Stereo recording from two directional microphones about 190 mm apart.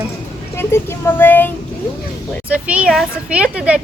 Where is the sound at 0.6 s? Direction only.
10° left (ahead or behind).